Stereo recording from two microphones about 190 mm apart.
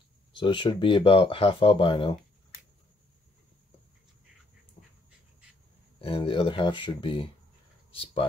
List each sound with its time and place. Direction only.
0.3 s speech: 25° left (ahead or behind)
5.9 s speech: 30° left (ahead or behind)